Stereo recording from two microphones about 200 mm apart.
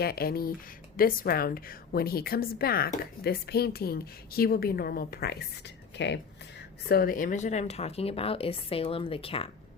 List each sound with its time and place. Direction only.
0.0 s a woman's voice: 50° left (ahead or behind)
6.8 s a woman's voice: 50° left (ahead or behind); by 9.5 s 30° left (ahead or behind)